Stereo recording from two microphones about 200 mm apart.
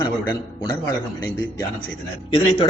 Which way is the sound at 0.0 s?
20° left (ahead or behind).